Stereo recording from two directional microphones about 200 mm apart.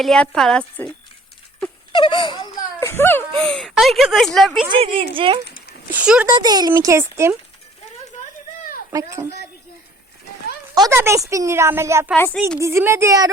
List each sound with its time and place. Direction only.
0.0 s speech: centre (ahead or behind)
1.9 s speech: 25° left (ahead or behind)
2.9 s speech: 10° left (ahead or behind)
4.7 s speech: 25° right (ahead or behind)
5.5 s a sound: 50° left (ahead or behind)
5.9 s speech: 5° right (ahead or behind)
6.2 s a woman's voice: 20° right (ahead or behind)
8.9 s a woman's voice: 15° right (ahead or behind)
10.8 s a woman's voice: 15° right (ahead or behind)
12.1 s a woman's voice: 5° left (ahead or behind)
12.5 s a woman's voice: 15° right (ahead or behind)